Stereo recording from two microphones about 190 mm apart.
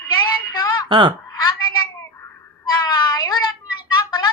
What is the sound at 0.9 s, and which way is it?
Speech, 25° right (ahead or behind).